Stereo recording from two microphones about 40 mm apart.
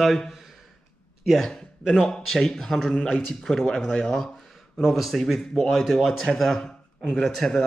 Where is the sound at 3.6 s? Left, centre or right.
Centre.